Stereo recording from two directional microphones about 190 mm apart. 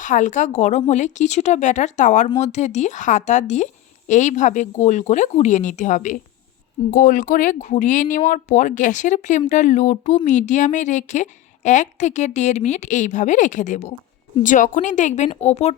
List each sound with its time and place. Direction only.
0.0 s a woman's voice: 40° left (ahead or behind)